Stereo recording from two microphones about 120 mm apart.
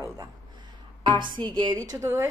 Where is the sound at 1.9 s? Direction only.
25° right (ahead or behind).